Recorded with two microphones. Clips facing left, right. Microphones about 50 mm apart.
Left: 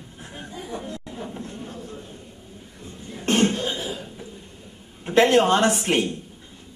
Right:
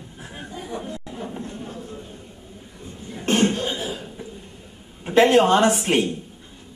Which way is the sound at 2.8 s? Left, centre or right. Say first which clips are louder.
Right 1 dB; centre.